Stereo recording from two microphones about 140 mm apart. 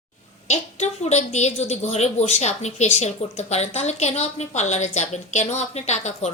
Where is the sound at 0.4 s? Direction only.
50° left (ahead or behind).